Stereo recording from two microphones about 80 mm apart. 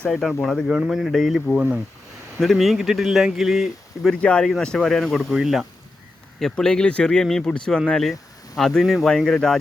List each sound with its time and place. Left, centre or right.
0.1 s speech: centre
1.5 s speech: centre
2.4 s speech: centre
4.1 s speech: centre
6.4 s speech: centre